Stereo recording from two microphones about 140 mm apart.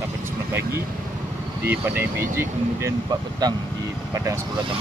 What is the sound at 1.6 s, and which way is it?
Speech, 15° right (ahead or behind).